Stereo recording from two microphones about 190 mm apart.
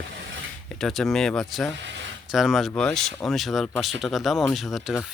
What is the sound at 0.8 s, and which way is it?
Speech, centre (ahead or behind).